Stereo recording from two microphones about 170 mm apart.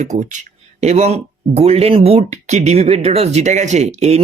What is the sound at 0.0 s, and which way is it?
Speech, 45° right (ahead or behind).